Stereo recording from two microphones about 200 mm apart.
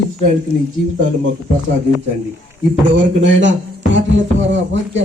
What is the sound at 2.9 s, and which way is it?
Speech, 65° right (ahead or behind).